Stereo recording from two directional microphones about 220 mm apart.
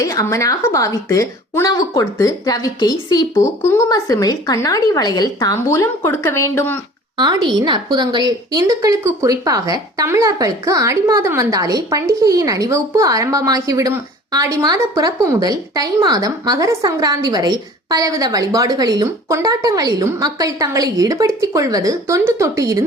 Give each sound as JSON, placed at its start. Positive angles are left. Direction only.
{"t": 0.0, "sound": "a woman's voice", "side_deg": 15}
{"t": 7.2, "sound": "a woman's voice", "side_deg": -20}